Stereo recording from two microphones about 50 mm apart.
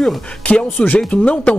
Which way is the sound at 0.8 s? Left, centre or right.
Left.